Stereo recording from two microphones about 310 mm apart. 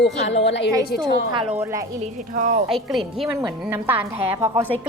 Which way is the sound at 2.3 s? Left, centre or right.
Right.